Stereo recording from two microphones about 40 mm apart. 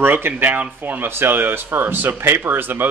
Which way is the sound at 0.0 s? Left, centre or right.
Right.